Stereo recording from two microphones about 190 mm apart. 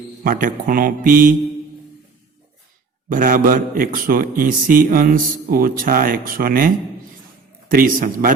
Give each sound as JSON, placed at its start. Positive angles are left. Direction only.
{"t": 0.3, "sound": "a man's voice", "side_deg": -45}
{"t": 3.1, "sound": "a man's voice", "side_deg": -45}
{"t": 7.7, "sound": "a man's voice", "side_deg": -45}